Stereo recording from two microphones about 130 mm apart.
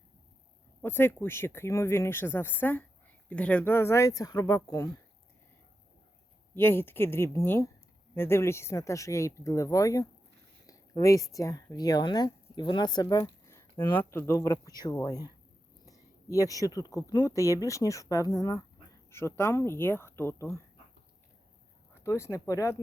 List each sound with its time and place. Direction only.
0.8 s speech: 15° left (ahead or behind)
6.5 s speech: 15° left (ahead or behind)
10.7 s a sound: 25° left (ahead or behind)
11.3 s speech: 25° left (ahead or behind)
22.0 s speech: 25° left (ahead or behind)